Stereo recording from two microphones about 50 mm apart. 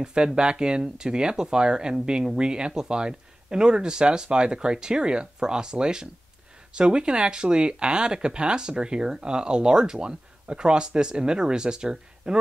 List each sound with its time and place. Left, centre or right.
0.0 s speech: centre